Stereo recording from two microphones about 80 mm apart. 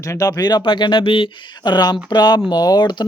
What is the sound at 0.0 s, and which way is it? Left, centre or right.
Speech, left.